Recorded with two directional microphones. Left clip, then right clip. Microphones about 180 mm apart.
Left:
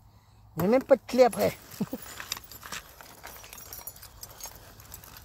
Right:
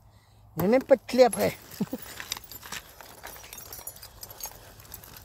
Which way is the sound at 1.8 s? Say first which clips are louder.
Right 1 dB; 35° right (ahead or behind).